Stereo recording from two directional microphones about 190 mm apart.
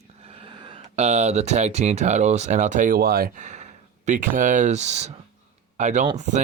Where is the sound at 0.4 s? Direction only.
25° right (ahead or behind).